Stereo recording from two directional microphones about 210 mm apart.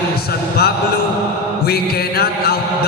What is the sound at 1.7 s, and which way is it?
Music, 50° left (ahead or behind).